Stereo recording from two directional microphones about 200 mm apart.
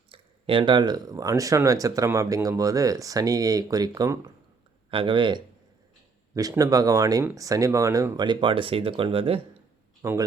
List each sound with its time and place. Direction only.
0.1 s speech: 25° right (ahead or behind)
10.0 s speech: 15° right (ahead or behind)